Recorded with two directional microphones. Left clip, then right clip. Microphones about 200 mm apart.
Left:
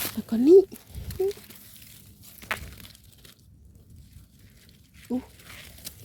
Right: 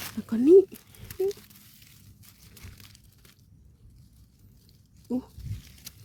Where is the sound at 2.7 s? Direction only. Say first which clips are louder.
Left 4 dB; 15° left (ahead or behind).